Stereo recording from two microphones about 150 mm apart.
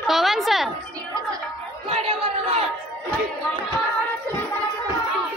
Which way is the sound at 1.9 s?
40° right (ahead or behind).